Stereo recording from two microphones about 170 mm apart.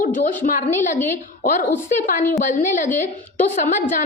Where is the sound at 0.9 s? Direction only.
15° left (ahead or behind).